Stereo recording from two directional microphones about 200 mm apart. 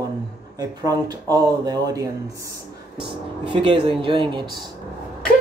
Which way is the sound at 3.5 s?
25° right (ahead or behind).